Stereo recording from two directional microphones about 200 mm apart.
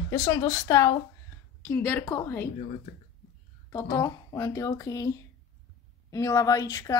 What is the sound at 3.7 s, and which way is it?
A woman's voice, 15° left (ahead or behind).